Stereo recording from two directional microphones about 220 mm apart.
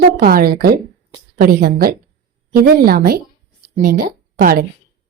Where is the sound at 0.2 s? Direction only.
40° right (ahead or behind).